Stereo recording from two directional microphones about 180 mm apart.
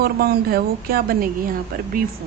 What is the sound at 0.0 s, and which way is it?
A woman's voice, 60° right (ahead or behind).